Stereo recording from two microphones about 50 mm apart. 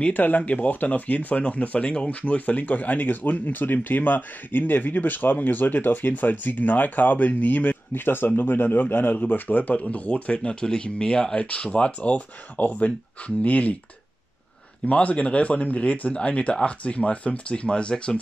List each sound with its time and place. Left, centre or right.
0.1 s speech: left
14.9 s speech: left